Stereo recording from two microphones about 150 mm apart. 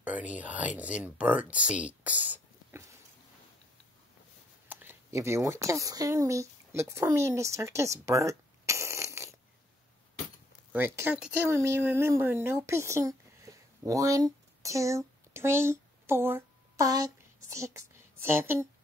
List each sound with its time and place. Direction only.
0.0 s speech: 10° right (ahead or behind)
4.6 s speech: 15° right (ahead or behind)
10.7 s speech: 15° right (ahead or behind)